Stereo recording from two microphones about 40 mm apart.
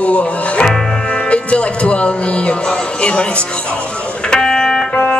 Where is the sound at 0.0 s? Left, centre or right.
Left.